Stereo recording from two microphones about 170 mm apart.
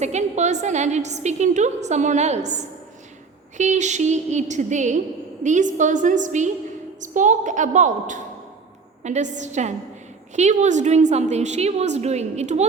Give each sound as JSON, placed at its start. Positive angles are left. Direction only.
{"t": 0.0, "sound": "a woman's voice", "side_deg": -40}